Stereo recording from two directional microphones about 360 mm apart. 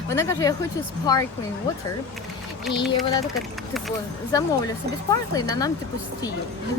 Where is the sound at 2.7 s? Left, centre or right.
Centre.